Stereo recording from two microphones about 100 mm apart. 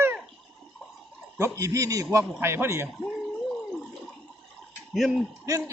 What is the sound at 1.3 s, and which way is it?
A man's voice, 30° right (ahead or behind).